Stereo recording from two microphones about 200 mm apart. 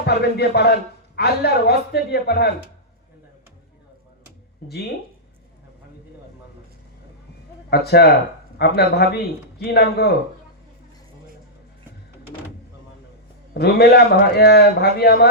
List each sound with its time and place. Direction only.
0.0 s a man's voice: 55° left (ahead or behind)
4.6 s a man's voice: 50° left (ahead or behind)
7.7 s a man's voice: 55° left (ahead or behind)
13.5 s a man's voice: 55° left (ahead or behind)